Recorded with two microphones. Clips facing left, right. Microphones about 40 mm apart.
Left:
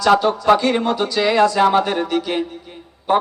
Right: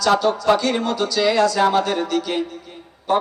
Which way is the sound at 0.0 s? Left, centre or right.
Left.